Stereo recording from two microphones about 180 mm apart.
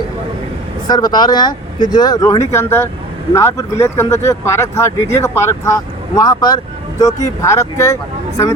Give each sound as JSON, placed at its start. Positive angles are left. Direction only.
{"t": 0.9, "sound": "speech", "side_deg": 20}